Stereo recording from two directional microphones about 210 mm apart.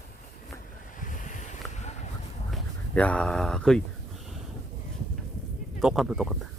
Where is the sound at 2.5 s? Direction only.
5° left (ahead or behind).